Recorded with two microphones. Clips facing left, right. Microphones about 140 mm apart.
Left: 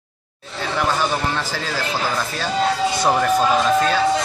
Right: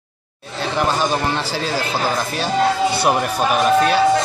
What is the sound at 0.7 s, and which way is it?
Speech, 20° right (ahead or behind).